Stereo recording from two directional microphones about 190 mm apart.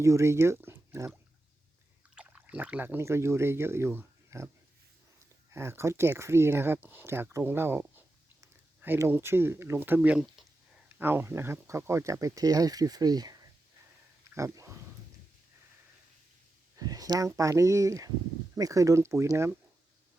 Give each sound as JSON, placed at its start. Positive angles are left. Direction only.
{"t": 0.0, "sound": "speech", "side_deg": -15}
{"t": 2.1, "sound": "speech", "side_deg": -10}
{"t": 5.5, "sound": "speech", "side_deg": -15}
{"t": 14.3, "sound": "speech", "side_deg": -15}
{"t": 16.7, "sound": "speech", "side_deg": -20}